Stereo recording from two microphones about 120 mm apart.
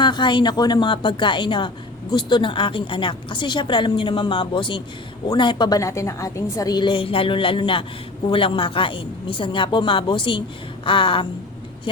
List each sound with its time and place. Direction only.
0.0 s speech: 40° left (ahead or behind)